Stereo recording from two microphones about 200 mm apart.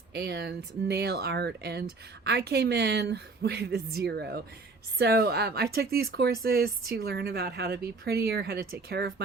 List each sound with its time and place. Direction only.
0.1 s a woman's voice: 55° right (ahead or behind)